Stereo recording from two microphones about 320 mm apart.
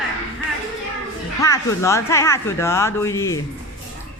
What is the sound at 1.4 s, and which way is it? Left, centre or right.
Speech, centre.